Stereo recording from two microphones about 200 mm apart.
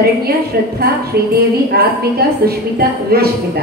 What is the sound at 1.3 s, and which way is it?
A woman's voice, 50° right (ahead or behind).